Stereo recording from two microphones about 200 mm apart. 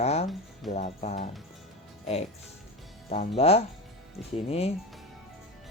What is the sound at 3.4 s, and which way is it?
Speech, 30° left (ahead or behind).